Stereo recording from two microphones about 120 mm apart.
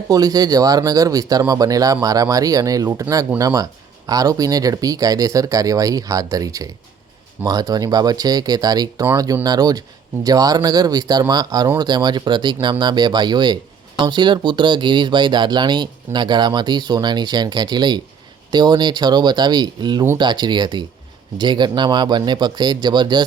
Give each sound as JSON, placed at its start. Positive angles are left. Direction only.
{"t": 0.1, "sound": "speech", "side_deg": -30}